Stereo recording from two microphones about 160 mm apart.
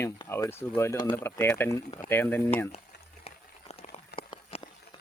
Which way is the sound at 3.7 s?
35° left (ahead or behind).